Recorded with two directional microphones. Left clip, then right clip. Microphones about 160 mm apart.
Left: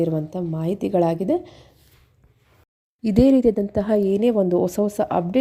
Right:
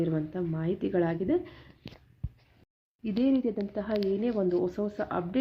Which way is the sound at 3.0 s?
50° left (ahead or behind).